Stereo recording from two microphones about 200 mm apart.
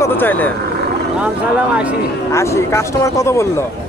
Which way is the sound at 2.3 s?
15° left (ahead or behind).